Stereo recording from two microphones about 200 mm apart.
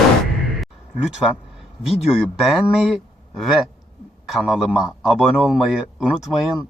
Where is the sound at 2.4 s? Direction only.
Centre (ahead or behind).